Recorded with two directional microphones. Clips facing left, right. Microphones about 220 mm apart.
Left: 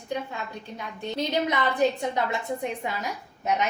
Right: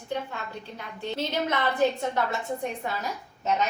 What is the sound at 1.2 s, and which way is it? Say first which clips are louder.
A woman's voice: left 3 dB; 15° left (ahead or behind).